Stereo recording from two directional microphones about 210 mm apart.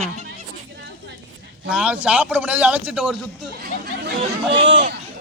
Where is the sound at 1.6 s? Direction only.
5° right (ahead or behind).